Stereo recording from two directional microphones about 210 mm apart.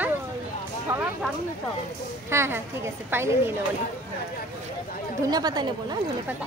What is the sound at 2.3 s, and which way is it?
Speech, 10° right (ahead or behind).